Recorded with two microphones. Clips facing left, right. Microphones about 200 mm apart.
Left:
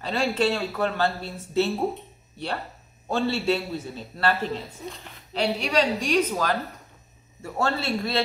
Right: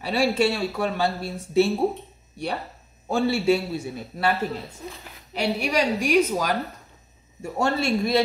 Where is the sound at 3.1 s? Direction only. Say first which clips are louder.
Right 3 dB; 10° right (ahead or behind).